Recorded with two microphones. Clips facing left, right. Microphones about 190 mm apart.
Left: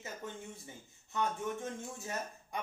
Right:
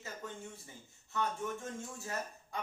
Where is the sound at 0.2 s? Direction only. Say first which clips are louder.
Left 1 dB; 20° left (ahead or behind).